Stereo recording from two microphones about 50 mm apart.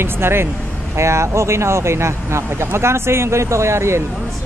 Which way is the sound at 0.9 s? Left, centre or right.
Right.